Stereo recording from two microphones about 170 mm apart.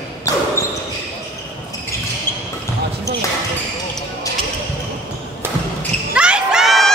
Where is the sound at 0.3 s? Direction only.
20° left (ahead or behind).